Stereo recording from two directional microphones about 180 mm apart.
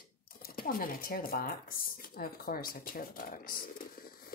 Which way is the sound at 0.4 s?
55° left (ahead or behind).